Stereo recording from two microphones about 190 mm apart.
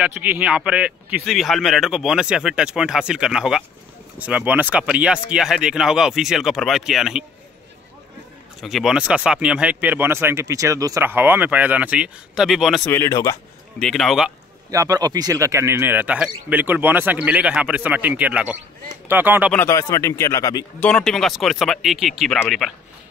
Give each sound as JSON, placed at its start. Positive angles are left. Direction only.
{"t": 0.0, "sound": "speech", "side_deg": -10}
{"t": 8.5, "sound": "speech", "side_deg": 0}
{"t": 12.9, "sound": "speech", "side_deg": 15}
{"t": 13.7, "sound": "speech", "side_deg": 0}
{"t": 14.7, "sound": "speech", "side_deg": -20}
{"t": 19.5, "sound": "speech", "side_deg": 15}
{"t": 20.8, "sound": "speech", "side_deg": 5}